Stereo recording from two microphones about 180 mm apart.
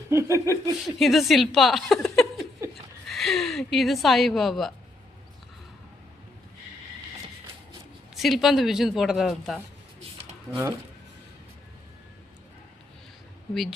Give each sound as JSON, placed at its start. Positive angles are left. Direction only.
{"t": 0.1, "sound": "a sound", "side_deg": -15}
{"t": 0.9, "sound": "a woman's voice", "side_deg": 0}
{"t": 8.1, "sound": "a woman's voice", "side_deg": 0}
{"t": 13.5, "sound": "a woman's voice", "side_deg": 0}